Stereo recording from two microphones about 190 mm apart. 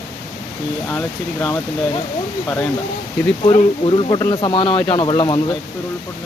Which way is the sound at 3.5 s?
25° left (ahead or behind).